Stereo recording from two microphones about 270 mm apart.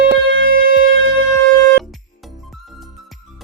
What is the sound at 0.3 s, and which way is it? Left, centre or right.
Wind instrument, right.